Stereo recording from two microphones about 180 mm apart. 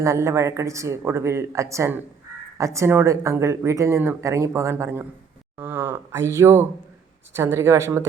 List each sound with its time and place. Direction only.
0.0 s speech: 15° right (ahead or behind)